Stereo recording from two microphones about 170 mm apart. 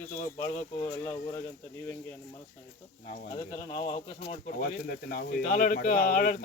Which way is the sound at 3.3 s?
25° left (ahead or behind).